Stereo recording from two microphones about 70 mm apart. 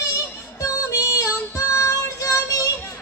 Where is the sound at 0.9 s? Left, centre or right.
Left.